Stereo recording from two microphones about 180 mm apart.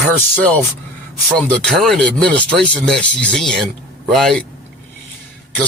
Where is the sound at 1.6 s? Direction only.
Centre (ahead or behind).